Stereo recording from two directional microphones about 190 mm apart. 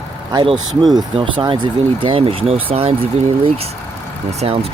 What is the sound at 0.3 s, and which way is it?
Speech, 20° right (ahead or behind).